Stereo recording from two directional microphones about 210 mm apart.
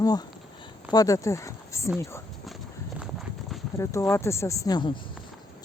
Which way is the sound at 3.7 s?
15° left (ahead or behind).